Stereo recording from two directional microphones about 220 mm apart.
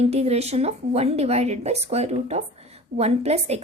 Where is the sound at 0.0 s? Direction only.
30° right (ahead or behind).